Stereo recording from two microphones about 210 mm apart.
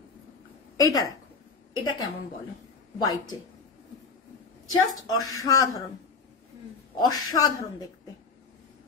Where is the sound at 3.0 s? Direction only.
20° left (ahead or behind).